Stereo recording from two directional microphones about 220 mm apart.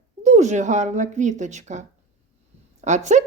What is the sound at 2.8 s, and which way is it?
Speech, 30° right (ahead or behind).